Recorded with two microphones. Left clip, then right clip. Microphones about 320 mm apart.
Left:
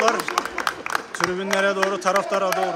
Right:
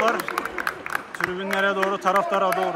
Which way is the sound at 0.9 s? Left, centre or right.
Centre.